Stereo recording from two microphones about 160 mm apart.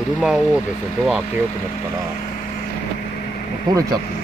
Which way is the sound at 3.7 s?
25° right (ahead or behind).